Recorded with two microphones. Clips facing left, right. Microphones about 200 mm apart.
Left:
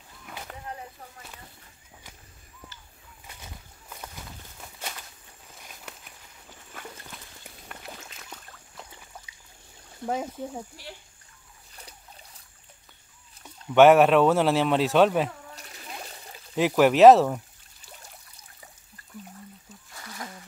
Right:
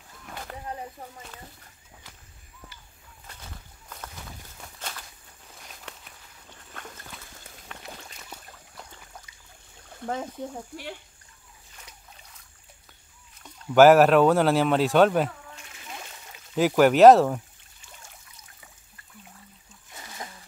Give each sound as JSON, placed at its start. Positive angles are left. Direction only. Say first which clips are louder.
{"t": 0.2, "sound": "rowboat", "louder": "right 2 dB", "side_deg": 5}
{"t": 3.3, "sound": "walk", "louder": "even", "side_deg": 10}
{"t": 7.6, "sound": "boat", "louder": "even", "side_deg": 5}
{"t": 9.1, "sound": "trickle", "louder": "left 1 dB", "side_deg": 5}
{"t": 10.0, "sound": "speech", "louder": "left 1 dB", "side_deg": 5}
{"t": 13.7, "sound": "speech", "louder": "right 1 dB", "side_deg": 0}
{"t": 15.5, "sound": "splash", "louder": "left 1 dB", "side_deg": 35}
{"t": 16.5, "sound": "speech", "louder": "right 1 dB", "side_deg": 0}
{"t": 19.9, "sound": "a sound", "louder": "even", "side_deg": -20}